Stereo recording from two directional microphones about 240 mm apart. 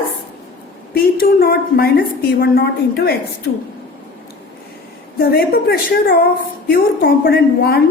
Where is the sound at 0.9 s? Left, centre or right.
Left.